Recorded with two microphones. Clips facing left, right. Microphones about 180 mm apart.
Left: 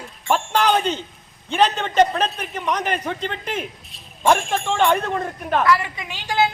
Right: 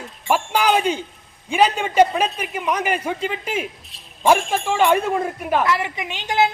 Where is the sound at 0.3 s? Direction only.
10° right (ahead or behind).